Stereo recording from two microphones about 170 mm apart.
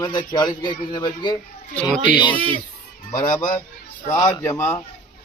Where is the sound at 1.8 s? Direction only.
5° right (ahead or behind).